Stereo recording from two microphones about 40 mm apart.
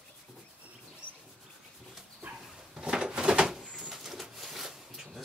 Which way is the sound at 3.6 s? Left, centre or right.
Centre.